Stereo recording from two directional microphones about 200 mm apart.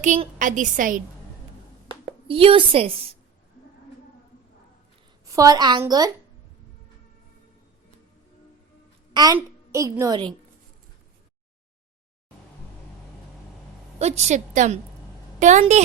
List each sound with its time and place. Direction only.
0.0 s a woman's voice: 35° right (ahead or behind)
1.9 s speech: 25° right (ahead or behind)
5.2 s a woman's voice: 15° right (ahead or behind)
9.1 s a woman's voice: 20° right (ahead or behind)
14.0 s a woman's voice: 35° right (ahead or behind)